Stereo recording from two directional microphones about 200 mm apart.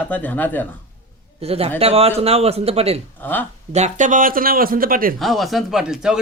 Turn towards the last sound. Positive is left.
turn(degrees=-5)  # may be behind; listen again after turning